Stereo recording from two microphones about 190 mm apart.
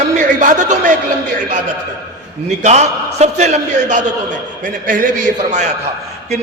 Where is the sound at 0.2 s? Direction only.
40° right (ahead or behind).